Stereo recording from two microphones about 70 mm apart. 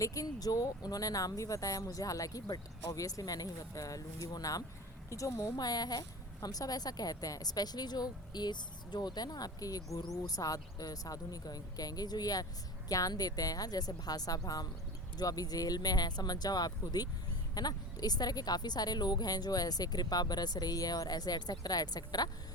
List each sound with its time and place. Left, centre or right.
0.0 s speech: left
5.0 s a woman's voice: left
5.4 s a woman's voice: left